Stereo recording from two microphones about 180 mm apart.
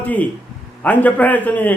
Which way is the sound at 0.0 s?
10° left (ahead or behind).